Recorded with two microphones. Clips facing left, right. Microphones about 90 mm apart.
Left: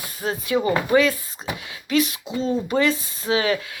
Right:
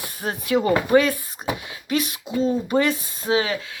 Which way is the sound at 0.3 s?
55° right (ahead or behind).